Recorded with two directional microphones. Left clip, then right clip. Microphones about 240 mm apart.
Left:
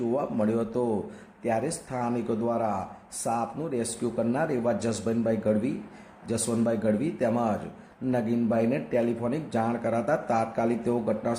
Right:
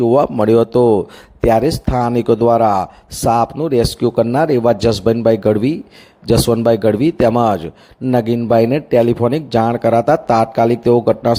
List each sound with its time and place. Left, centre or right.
0.1 s speech: right